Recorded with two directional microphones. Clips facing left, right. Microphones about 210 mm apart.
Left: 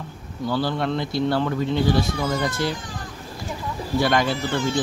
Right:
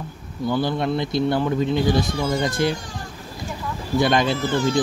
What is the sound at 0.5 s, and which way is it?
Speech, 20° right (ahead or behind).